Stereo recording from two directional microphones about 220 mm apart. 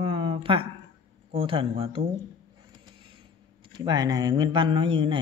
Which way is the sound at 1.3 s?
25° right (ahead or behind).